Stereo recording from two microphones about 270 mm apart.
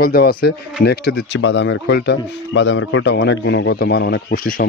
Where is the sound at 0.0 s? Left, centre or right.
Left.